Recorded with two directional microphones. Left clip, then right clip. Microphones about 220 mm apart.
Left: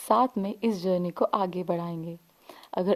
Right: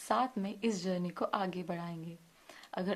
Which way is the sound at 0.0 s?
45° left (ahead or behind).